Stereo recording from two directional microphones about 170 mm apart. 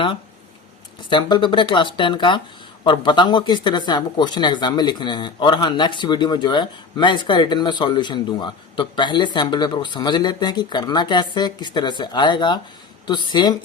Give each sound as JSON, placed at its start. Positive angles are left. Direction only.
{"t": 1.1, "sound": "speech", "side_deg": 30}